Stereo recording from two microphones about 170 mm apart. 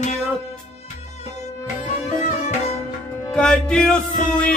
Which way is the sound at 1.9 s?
40° left (ahead or behind).